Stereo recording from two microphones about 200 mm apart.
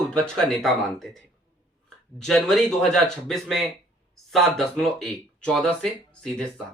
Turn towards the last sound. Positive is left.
turn(degrees=5)  # may be behind; listen again after turning